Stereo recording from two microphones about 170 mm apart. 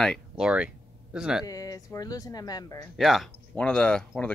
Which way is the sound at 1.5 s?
20° left (ahead or behind).